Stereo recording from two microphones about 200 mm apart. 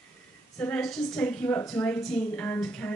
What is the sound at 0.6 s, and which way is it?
A woman's voice, 5° left (ahead or behind).